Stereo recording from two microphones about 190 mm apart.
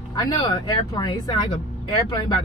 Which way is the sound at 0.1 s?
20° left (ahead or behind).